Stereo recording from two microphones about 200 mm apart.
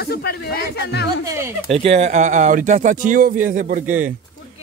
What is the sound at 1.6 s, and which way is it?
Speech, 30° right (ahead or behind).